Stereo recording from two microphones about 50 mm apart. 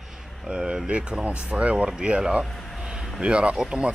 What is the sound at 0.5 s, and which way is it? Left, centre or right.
Speech, centre.